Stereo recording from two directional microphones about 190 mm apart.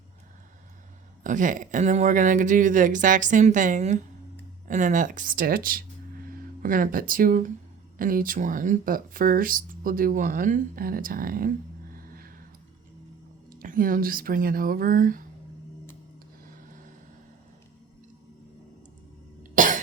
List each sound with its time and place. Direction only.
1.2 s speech: 45° right (ahead or behind)
11.9 s music: 50° right (ahead or behind)
13.6 s speech: 45° right (ahead or behind)
19.4 s cough: 45° right (ahead or behind)